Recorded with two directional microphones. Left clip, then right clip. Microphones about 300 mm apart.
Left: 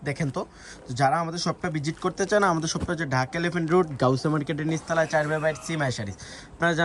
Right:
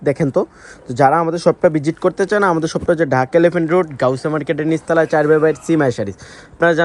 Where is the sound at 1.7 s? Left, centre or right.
Centre.